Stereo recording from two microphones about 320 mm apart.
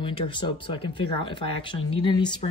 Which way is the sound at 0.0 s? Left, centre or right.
Centre.